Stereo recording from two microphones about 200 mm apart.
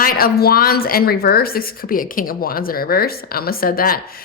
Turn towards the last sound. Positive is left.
turn(degrees=45)  # may be behind; listen again after turning